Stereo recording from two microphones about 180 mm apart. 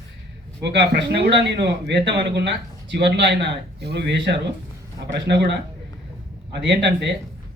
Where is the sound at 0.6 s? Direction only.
70° right (ahead or behind).